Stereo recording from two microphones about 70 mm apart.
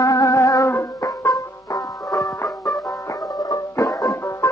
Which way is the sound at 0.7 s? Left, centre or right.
Left.